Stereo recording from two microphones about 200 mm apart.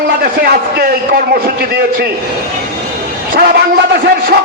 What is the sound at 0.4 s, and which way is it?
Speech, 50° right (ahead or behind).